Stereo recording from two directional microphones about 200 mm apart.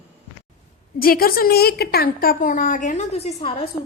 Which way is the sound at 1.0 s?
45° left (ahead or behind).